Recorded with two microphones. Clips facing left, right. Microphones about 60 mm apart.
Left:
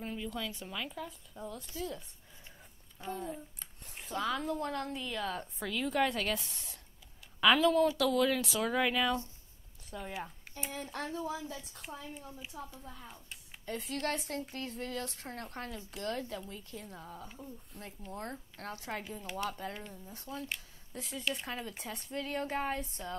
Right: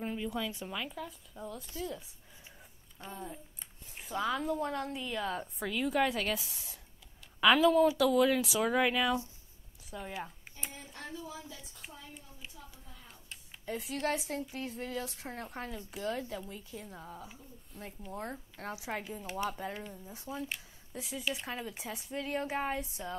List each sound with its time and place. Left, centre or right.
0.0 s speech: centre
10.7 s speech: left
11.2 s a woman's voice: left
12.6 s a woman's voice: left
13.1 s speech: centre